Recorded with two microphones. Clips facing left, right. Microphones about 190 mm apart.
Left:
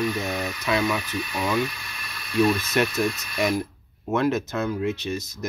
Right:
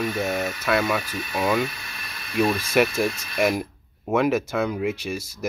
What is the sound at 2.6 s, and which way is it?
Speech, 10° right (ahead or behind).